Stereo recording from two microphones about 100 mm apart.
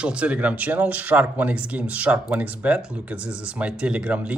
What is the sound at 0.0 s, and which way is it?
Speech, 10° right (ahead or behind).